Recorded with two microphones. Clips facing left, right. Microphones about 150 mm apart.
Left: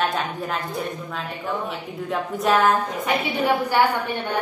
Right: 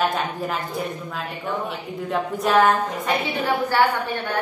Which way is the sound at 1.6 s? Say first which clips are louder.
Even; centre (ahead or behind).